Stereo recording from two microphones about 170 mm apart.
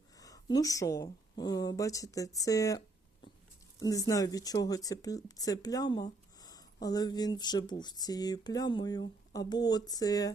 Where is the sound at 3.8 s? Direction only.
20° left (ahead or behind).